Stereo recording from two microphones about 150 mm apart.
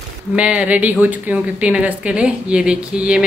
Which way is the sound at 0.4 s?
10° right (ahead or behind).